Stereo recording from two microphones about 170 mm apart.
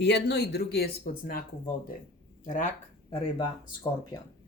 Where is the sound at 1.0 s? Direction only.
55° left (ahead or behind).